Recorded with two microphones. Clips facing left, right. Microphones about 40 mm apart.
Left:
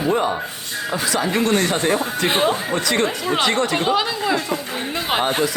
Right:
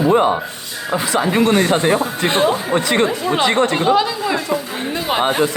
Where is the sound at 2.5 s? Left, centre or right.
Right.